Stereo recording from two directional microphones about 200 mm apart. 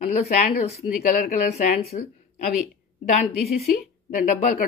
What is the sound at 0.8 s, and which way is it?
Speech, 45° left (ahead or behind).